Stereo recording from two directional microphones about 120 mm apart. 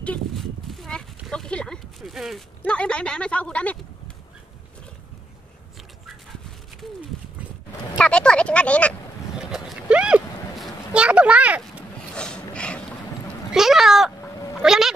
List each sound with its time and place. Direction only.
0.0 s a sound: 5° left (ahead or behind)
2.6 s a woman's voice: 10° left (ahead or behind)
8.0 s speech: 10° left (ahead or behind)
9.4 s a sound: 5° right (ahead or behind)
12.1 s mechanisms: 5° left (ahead or behind)
13.5 s cat: 5° right (ahead or behind)
14.2 s cat: 25° left (ahead or behind)
14.6 s cat: 5° right (ahead or behind)